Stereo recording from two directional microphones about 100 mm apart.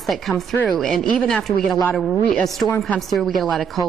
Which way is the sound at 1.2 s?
5° left (ahead or behind).